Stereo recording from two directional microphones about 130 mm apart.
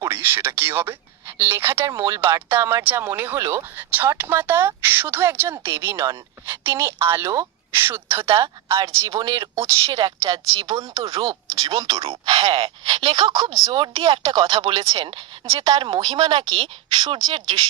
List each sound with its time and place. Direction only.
0.0 s speech: 15° right (ahead or behind)
11.0 s speech: 45° right (ahead or behind)